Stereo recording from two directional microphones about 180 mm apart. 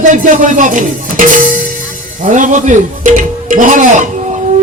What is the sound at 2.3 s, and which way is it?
A man's voice, 45° right (ahead or behind).